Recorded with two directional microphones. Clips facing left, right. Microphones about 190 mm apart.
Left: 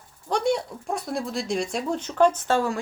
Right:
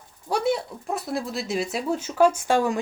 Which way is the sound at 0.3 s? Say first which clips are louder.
Even; 5° right (ahead or behind).